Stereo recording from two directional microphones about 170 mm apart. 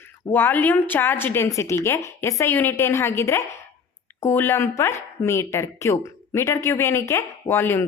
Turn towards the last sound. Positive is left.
turn(degrees=15)  # may be behind; listen again after turning